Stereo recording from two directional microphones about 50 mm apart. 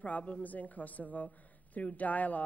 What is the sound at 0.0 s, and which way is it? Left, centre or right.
Speech, left.